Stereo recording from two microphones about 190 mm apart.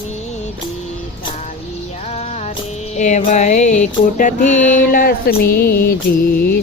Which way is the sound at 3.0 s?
35° left (ahead or behind).